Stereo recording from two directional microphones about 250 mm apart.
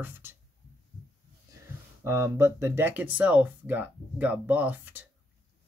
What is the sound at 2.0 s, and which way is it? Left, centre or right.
Speech, centre.